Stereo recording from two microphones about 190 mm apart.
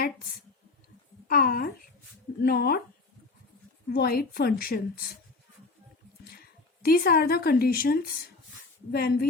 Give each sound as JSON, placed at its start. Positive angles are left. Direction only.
{"t": 1.3, "sound": "a woman's voice", "side_deg": 50}
{"t": 3.9, "sound": "a woman's voice", "side_deg": 55}
{"t": 6.8, "sound": "a woman's voice", "side_deg": 50}